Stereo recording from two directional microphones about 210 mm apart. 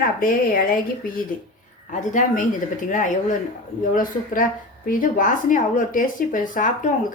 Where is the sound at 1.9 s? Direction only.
35° left (ahead or behind).